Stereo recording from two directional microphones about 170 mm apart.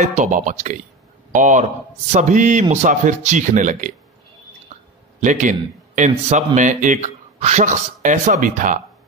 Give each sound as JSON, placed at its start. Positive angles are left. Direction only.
{"t": 0.0, "sound": "speech", "side_deg": -45}
{"t": 5.2, "sound": "speech", "side_deg": -50}